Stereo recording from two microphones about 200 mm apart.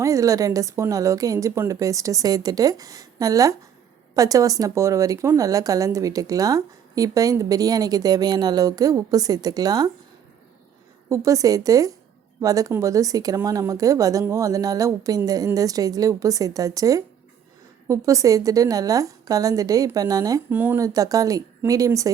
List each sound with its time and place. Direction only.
0.0 s a woman's voice: 15° right (ahead or behind)
11.1 s a woman's voice: 15° right (ahead or behind)